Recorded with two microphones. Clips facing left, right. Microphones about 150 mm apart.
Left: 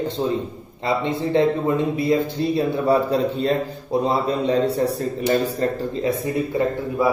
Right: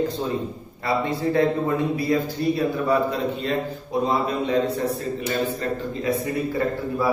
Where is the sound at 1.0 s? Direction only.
25° left (ahead or behind).